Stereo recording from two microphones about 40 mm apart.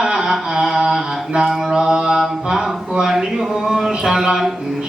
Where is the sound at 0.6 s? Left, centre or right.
Centre.